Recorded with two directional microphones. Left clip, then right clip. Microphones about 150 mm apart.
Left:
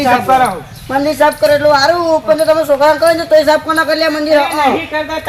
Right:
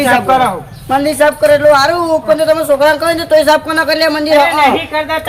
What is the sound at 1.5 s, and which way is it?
A woman's voice, 35° right (ahead or behind).